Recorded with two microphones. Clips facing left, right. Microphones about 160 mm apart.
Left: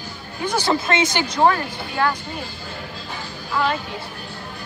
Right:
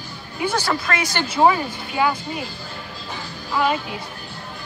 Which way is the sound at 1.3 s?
5° right (ahead or behind).